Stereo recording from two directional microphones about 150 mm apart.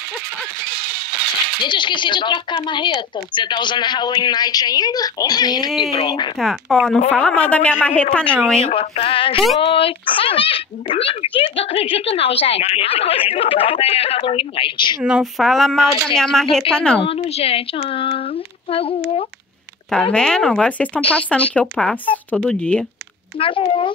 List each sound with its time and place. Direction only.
1.6 s a child's voice: 30° left (ahead or behind)
6.4 s a man's voice: centre (ahead or behind)
8.6 s a child's voice: 40° left (ahead or behind)
15.0 s speech: 5° right (ahead or behind)
17.0 s a child's voice: 40° left (ahead or behind)
19.9 s a man's voice: 5° left (ahead or behind)
23.4 s a child's voice: 35° left (ahead or behind)